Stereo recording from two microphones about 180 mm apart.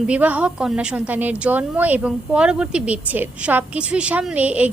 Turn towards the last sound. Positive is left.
turn(degrees=-10)  # may be behind; listen again after turning